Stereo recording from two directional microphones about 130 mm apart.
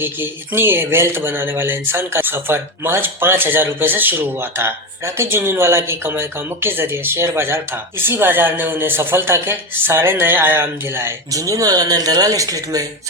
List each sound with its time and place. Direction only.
0.0 s speech: 15° right (ahead or behind)